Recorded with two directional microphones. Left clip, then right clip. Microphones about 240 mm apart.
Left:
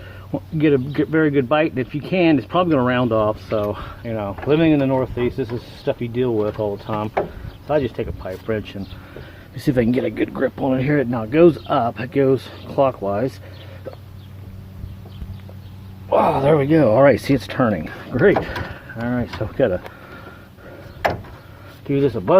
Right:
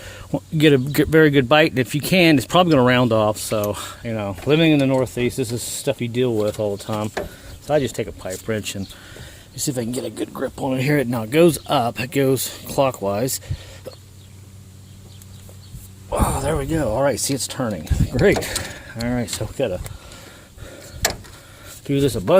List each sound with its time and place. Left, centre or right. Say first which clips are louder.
0.0 s a sound: right 2 dB; right
0.3 s speech: right 2 dB; right
9.6 s speech: left 7 dB; centre
10.7 s speech: right 3 dB; right
16.0 s speech: left 7 dB; centre
18.1 s speech: left 2 dB; right
19.5 s speech: left 5 dB; centre
21.8 s speech: left 1 dB; right